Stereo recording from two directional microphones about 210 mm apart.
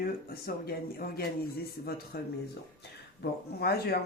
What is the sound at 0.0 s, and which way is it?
Speech, 45° left (ahead or behind).